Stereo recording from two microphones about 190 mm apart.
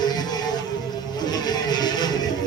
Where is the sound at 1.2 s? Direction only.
20° left (ahead or behind).